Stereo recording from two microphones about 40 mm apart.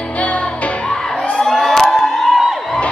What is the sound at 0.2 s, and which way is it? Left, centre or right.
Music, left.